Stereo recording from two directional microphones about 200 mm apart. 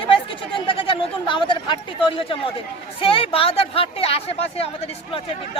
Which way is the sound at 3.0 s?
25° left (ahead or behind).